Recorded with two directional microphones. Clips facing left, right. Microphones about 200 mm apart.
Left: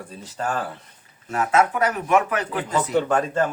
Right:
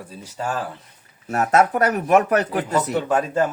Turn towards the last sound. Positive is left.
turn(degrees=-5)  # may be behind; listen again after turning